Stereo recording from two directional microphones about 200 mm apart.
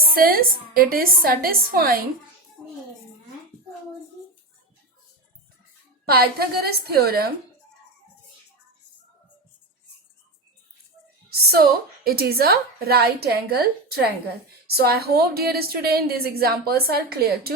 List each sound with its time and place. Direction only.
0.0 s a woman's voice: 45° right (ahead or behind)
6.1 s a woman's voice: 50° right (ahead or behind)
11.3 s a woman's voice: 50° right (ahead or behind)